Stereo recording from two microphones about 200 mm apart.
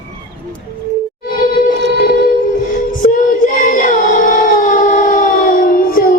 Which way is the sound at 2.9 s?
40° left (ahead or behind).